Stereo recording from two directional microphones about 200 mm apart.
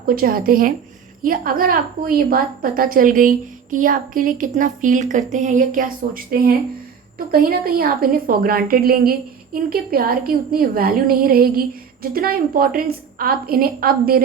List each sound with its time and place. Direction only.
0.0 s a woman's voice: 45° right (ahead or behind)
7.3 s a woman's voice: 50° right (ahead or behind)